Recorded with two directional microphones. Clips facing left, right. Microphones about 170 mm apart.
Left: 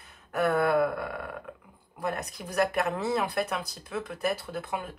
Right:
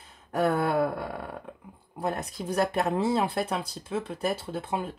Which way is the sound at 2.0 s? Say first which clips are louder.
Right 2 dB; 30° right (ahead or behind).